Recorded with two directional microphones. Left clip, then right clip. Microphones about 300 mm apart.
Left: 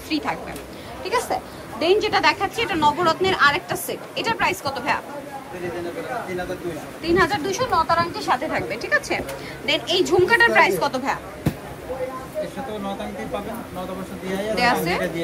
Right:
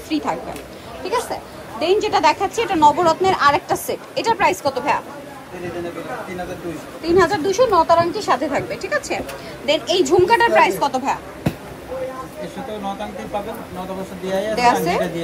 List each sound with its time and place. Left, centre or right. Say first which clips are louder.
0.1 s a woman's voice: right 3 dB; centre
7.1 s speech: right 4 dB; centre
8.5 s a woman's voice: right 1 dB; centre
14.5 s a woman's voice: right 3 dB; centre